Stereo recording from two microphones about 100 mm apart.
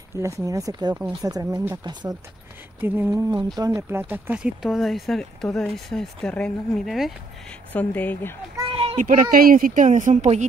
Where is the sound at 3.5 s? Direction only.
40° right (ahead or behind).